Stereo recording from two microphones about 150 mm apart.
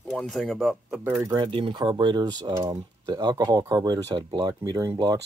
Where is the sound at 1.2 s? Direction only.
25° right (ahead or behind).